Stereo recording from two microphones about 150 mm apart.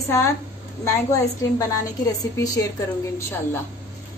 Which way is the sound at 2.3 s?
25° left (ahead or behind).